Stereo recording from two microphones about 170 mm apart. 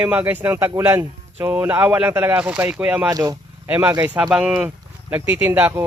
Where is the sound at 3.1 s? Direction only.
20° right (ahead or behind).